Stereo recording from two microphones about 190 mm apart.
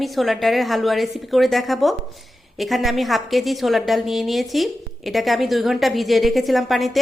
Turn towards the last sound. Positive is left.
turn(degrees=0)  # may be behind; listen again after turning